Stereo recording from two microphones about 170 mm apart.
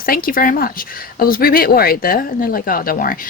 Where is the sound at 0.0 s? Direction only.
55° left (ahead or behind).